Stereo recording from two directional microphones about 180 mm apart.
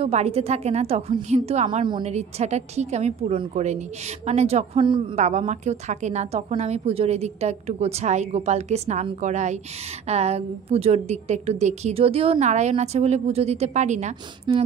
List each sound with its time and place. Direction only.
0.0 s a woman's voice: 35° right (ahead or behind)
5.2 s a woman's voice: 40° right (ahead or behind)